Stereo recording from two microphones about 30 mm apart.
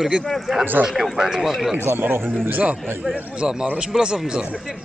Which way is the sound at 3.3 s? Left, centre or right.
Right.